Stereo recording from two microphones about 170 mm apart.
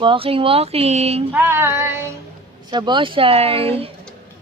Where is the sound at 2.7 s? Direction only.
25° right (ahead or behind).